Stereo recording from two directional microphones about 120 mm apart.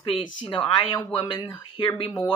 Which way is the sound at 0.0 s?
50° left (ahead or behind).